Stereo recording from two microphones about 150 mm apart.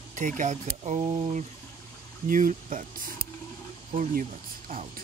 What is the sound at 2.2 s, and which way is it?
Speech, 65° right (ahead or behind).